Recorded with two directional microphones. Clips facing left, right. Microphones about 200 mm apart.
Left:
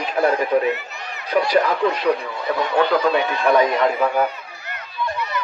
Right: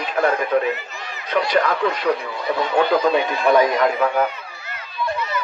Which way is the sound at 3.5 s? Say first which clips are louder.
Right 1 dB; centre (ahead or behind).